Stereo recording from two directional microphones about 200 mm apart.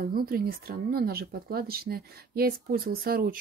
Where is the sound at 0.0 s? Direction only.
50° right (ahead or behind).